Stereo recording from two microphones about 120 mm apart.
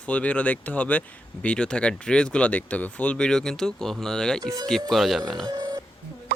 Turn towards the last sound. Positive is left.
turn(degrees=-30)  # may be behind; listen again after turning